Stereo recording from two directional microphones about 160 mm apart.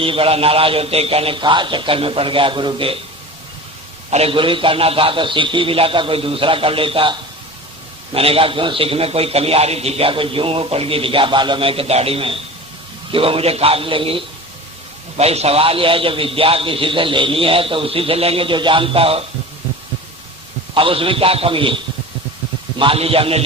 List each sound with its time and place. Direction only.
0.0 s a man's voice: 35° right (ahead or behind)
4.1 s a man's voice: 35° right (ahead or behind)
20.7 s a man's voice: 35° right (ahead or behind)
22.8 s a man's voice: 35° right (ahead or behind)